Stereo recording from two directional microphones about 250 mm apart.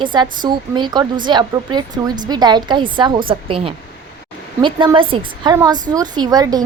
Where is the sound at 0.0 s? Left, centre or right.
Centre.